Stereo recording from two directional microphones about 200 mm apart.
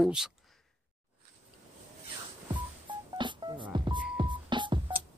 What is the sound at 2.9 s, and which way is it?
Telephone dialing, 25° right (ahead or behind).